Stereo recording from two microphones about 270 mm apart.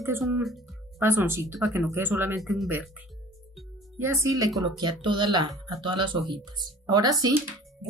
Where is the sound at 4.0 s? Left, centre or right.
Centre.